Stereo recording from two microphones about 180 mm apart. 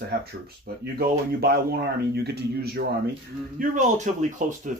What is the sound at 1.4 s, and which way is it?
Speech, 60° right (ahead or behind).